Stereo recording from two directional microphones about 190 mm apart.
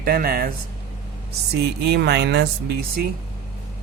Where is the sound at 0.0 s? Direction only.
50° right (ahead or behind).